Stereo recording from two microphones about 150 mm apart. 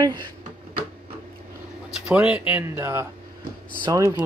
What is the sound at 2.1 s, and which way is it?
Speech, 10° right (ahead or behind).